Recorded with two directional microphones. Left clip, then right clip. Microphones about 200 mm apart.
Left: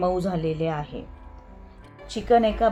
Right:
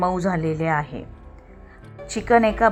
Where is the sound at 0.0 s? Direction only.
30° right (ahead or behind).